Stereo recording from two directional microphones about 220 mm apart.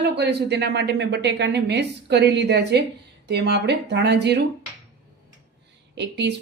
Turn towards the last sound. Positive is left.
turn(degrees=-50)  # may be behind; listen again after turning